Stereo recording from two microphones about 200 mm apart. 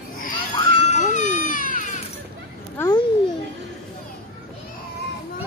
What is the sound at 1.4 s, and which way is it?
Cat, 40° left (ahead or behind).